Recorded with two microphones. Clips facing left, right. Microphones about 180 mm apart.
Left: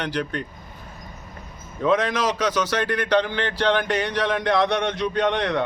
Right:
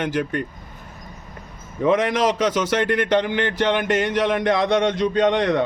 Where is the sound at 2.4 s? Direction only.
25° right (ahead or behind).